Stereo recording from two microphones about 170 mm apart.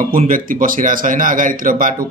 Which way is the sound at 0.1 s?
55° right (ahead or behind).